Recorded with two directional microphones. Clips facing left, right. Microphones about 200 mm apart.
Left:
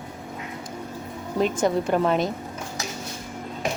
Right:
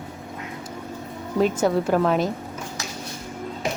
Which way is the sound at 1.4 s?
5° right (ahead or behind).